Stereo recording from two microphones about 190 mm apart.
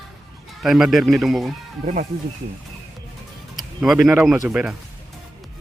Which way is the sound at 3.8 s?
5° right (ahead or behind).